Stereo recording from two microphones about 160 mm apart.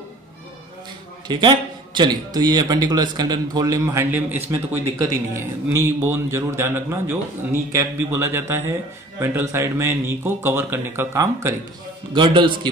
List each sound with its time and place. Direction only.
1.2 s a man's voice: 30° right (ahead or behind)
12.1 s a man's voice: 30° right (ahead or behind)